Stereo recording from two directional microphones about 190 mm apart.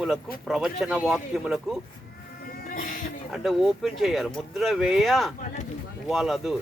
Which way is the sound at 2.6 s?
45° left (ahead or behind).